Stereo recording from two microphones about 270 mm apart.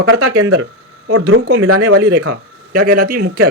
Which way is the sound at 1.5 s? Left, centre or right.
Right.